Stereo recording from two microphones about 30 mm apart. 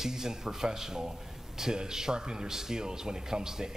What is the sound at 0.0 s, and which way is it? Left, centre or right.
A man's voice, centre.